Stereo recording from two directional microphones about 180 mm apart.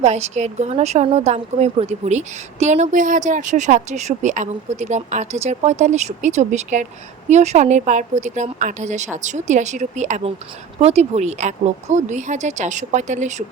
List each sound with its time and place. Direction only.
0.0 s a woman's voice: 40° right (ahead or behind)